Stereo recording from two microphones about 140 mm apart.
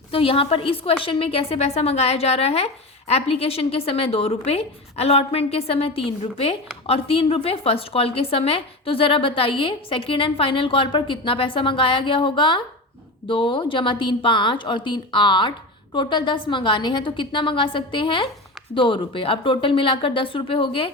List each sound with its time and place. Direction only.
0.1 s a woman's voice: 40° left (ahead or behind)